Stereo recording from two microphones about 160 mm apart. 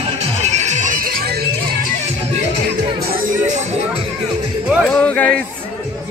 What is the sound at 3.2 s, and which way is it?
Music, 50° right (ahead or behind).